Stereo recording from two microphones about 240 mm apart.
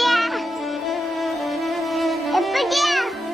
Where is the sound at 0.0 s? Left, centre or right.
Centre.